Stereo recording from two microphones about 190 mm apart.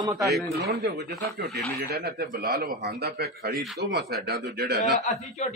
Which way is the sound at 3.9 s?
60° right (ahead or behind).